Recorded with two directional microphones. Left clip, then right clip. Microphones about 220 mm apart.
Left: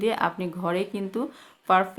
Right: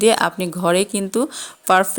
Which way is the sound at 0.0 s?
40° right (ahead or behind).